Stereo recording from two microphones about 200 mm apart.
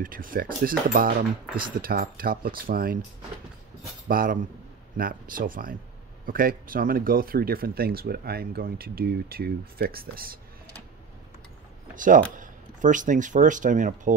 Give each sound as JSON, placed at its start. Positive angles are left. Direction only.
{"t": 0.0, "sound": "speech", "side_deg": -45}
{"t": 4.1, "sound": "speech", "side_deg": -45}
{"t": 11.9, "sound": "speech", "side_deg": -40}